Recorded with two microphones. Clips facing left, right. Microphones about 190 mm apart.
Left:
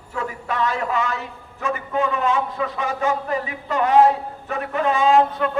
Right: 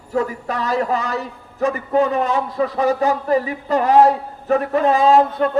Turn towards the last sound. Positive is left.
turn(degrees=-35)  # may be behind; listen again after turning